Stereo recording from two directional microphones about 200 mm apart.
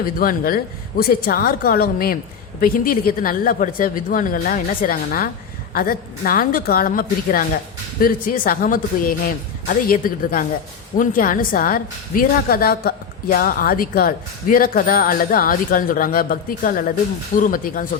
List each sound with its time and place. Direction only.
0.0 s a woman's voice: 45° left (ahead or behind)